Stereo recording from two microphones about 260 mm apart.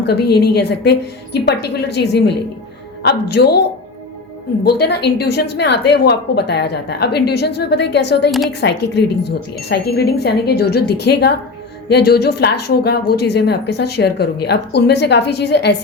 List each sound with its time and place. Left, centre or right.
0.0 s a woman's voice: left
4.6 s a woman's voice: left